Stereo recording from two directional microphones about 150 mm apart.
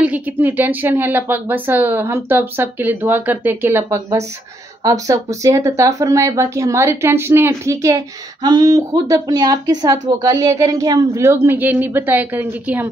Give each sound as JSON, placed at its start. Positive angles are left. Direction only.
{"t": 0.0, "sound": "a woman's voice", "side_deg": -10}